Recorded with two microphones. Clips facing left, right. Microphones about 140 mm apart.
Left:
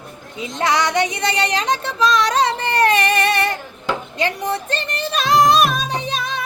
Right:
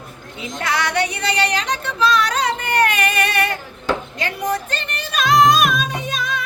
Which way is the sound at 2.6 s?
30° left (ahead or behind).